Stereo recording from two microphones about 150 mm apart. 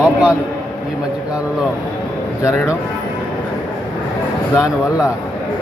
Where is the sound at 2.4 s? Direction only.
20° left (ahead or behind).